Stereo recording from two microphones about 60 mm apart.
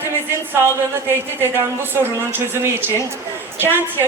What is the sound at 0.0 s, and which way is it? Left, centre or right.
Speech, right.